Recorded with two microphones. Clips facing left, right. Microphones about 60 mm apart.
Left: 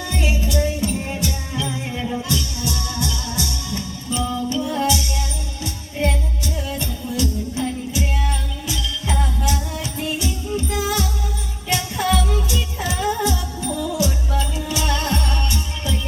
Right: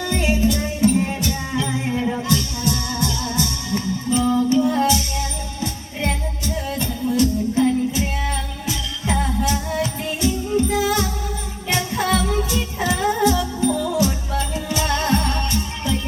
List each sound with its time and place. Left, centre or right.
0.2 s music: right
13.0 s music: right
13.7 s music: centre
14.0 s music: right